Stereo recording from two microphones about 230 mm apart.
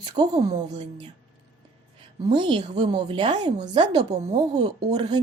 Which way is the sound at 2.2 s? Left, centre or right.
Centre.